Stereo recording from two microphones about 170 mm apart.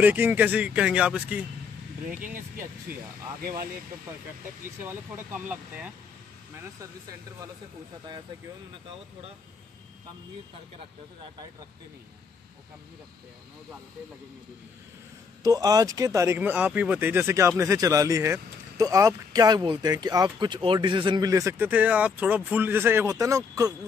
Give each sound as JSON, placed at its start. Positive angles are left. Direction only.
{"t": 0.0, "sound": "speech", "side_deg": -10}
{"t": 2.0, "sound": "speech", "side_deg": -50}
{"t": 4.6, "sound": "speech", "side_deg": -10}
{"t": 6.8, "sound": "speech", "side_deg": -20}
{"t": 15.4, "sound": "speech", "side_deg": -20}